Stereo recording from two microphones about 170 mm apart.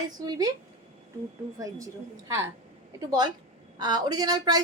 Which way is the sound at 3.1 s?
25° right (ahead or behind).